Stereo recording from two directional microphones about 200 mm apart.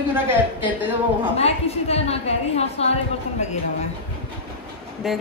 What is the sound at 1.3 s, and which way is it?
A woman's voice, 30° left (ahead or behind).